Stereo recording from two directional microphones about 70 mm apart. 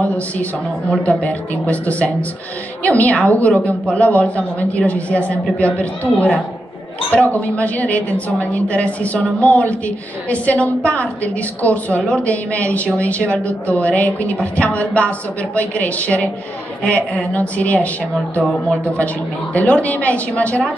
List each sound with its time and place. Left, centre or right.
1.0 s speech: left
16.8 s speech: left
19.5 s speech: left